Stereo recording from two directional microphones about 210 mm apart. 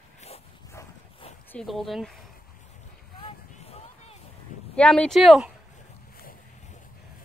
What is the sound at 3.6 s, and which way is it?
Music, 30° left (ahead or behind).